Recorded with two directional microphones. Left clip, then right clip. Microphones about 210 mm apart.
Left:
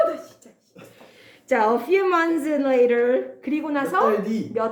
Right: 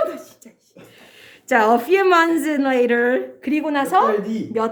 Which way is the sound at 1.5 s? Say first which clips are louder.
Right 4 dB; 35° right (ahead or behind).